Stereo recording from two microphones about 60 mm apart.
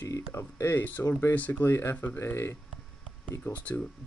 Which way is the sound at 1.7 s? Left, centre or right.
Left.